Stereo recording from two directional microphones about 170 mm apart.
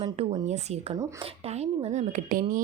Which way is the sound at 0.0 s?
40° right (ahead or behind).